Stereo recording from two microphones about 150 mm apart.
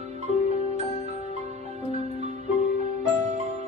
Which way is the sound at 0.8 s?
45° left (ahead or behind).